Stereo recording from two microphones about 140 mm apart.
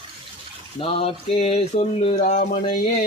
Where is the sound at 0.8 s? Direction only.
40° left (ahead or behind).